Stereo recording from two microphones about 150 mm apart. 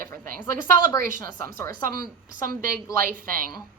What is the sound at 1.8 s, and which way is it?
Speech, 75° right (ahead or behind).